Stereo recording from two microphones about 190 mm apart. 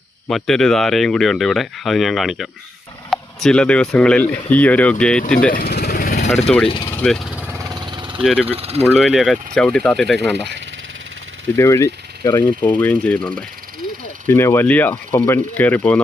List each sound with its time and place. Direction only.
0.3 s speech: centre (ahead or behind)
5.5 s vehicle: 55° left (ahead or behind)
6.7 s speech: 25° left (ahead or behind)
6.9 s vehicle: 5° left (ahead or behind)
7.7 s vehicle: 25° right (ahead or behind)
8.2 s speech: centre (ahead or behind)
8.4 s speech: 30° right (ahead or behind)
8.9 s speech: centre (ahead or behind)
11.5 s speech: 15° left (ahead or behind)